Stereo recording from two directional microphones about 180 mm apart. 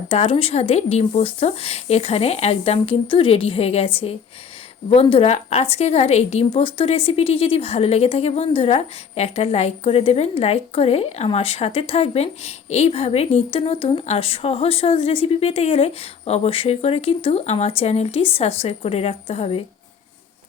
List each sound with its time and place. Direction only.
0.1 s a woman's voice: 35° left (ahead or behind)